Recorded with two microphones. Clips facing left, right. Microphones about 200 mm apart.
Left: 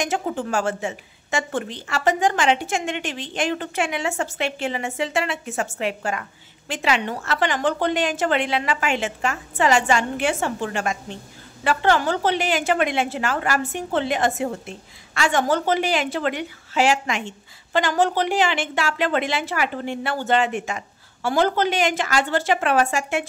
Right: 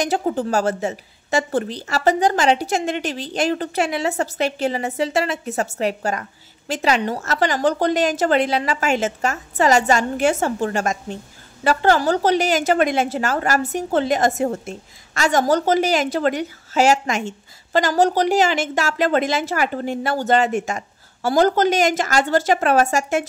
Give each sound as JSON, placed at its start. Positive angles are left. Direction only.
{"t": 0.0, "sound": "a woman's voice", "side_deg": -35}